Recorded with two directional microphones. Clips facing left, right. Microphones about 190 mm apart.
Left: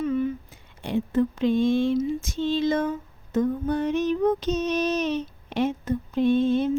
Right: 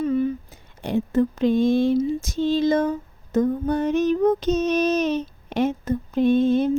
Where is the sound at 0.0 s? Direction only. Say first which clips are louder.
Right 3 dB; 35° right (ahead or behind).